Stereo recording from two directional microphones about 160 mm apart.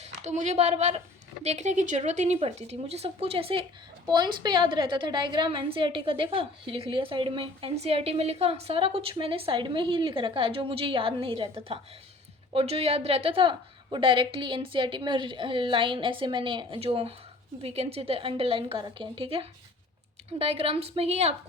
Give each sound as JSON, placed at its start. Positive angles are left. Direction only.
{"t": 0.0, "sound": "a woman's voice", "side_deg": -45}